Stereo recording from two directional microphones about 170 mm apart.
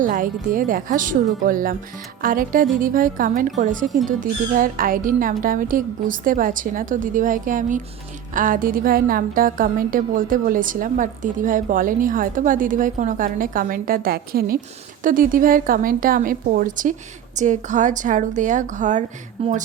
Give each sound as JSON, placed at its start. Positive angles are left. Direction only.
{"t": 0.0, "sound": "a woman's voice", "side_deg": -50}